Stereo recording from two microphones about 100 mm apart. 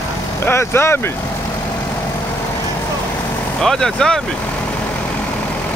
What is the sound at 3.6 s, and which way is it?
Speech, 5° left (ahead or behind).